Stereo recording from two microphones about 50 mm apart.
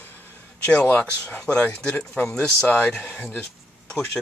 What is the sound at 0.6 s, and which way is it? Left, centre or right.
Speech, left.